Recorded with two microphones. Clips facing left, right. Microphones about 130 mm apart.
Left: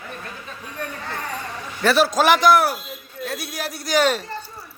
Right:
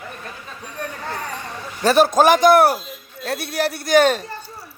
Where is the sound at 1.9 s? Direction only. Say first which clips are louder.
Right 3 dB; 50° right (ahead or behind).